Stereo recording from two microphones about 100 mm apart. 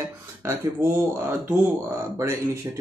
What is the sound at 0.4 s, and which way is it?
Speech, 30° right (ahead or behind).